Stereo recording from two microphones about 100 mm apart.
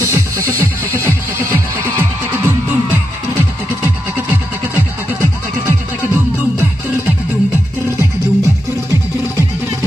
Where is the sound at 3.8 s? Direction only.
20° right (ahead or behind).